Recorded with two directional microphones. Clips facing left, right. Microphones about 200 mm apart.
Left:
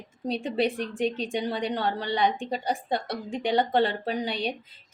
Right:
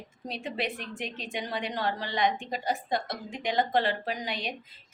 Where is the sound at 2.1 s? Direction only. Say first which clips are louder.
Left 4 dB; 30° left (ahead or behind).